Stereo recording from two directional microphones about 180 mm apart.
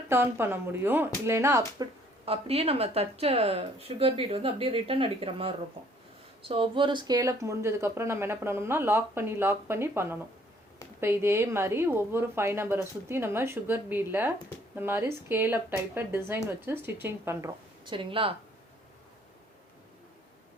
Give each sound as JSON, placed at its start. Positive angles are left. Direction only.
{"t": 0.1, "sound": "speech", "side_deg": -15}
{"t": 2.2, "sound": "speech", "side_deg": -35}
{"t": 17.8, "sound": "speech", "side_deg": -30}